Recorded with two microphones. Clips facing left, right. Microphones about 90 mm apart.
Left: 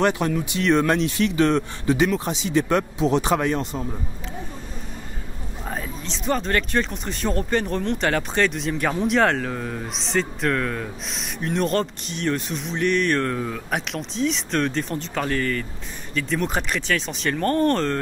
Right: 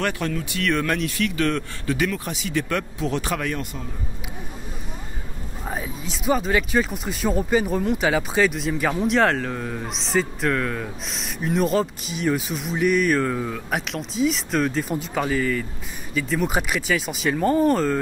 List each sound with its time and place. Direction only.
0.0 s speech: 20° left (ahead or behind)
5.7 s speech: 5° right (ahead or behind)